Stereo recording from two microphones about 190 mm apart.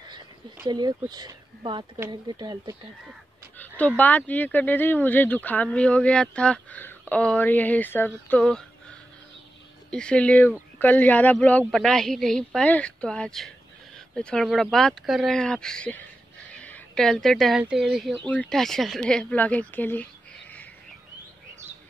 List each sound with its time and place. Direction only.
0.7 s speech: 20° right (ahead or behind)
3.5 s speech: 10° left (ahead or behind)
9.8 s speech: 5° left (ahead or behind)